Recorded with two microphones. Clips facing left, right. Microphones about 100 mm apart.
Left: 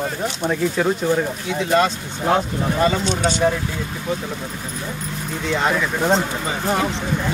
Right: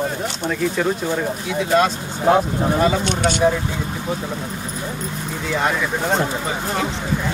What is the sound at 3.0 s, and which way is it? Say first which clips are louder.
Speech: right 1 dB; 60° right (ahead or behind).